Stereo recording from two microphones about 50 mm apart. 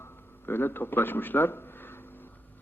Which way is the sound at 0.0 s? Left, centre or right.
Left.